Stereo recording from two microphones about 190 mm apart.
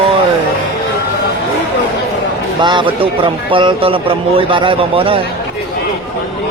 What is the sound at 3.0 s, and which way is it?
A man's voice, 25° right (ahead or behind).